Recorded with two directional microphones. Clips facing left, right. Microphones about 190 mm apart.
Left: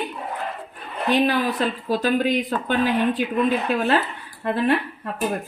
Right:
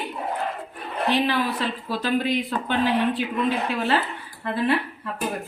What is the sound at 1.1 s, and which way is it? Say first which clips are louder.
Speech: left 4 dB; 45° left (ahead or behind).